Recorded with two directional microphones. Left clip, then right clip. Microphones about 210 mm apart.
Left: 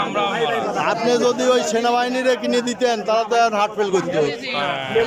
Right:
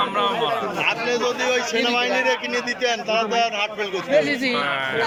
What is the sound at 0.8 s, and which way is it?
Speech, 20° left (ahead or behind).